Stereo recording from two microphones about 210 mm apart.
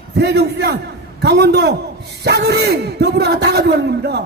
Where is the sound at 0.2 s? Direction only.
55° right (ahead or behind).